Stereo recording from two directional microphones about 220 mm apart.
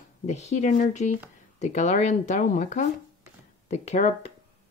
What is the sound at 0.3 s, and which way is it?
Speech, 30° left (ahead or behind).